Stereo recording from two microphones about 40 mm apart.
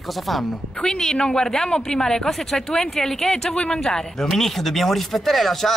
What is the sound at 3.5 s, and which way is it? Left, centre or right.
A man's voice, left.